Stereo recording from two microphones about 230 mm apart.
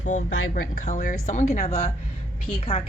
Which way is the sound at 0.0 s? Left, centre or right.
Left.